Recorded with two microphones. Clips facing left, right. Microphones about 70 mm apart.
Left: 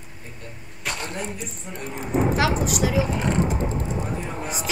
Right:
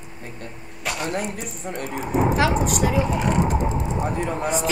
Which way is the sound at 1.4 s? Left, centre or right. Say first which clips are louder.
Right 4 dB; right.